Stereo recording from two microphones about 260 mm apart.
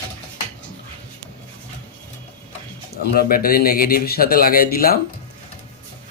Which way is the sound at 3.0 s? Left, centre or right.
Left.